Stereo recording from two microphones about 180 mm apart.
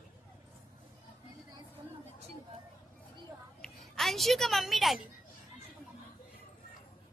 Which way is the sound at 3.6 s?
Centre (ahead or behind).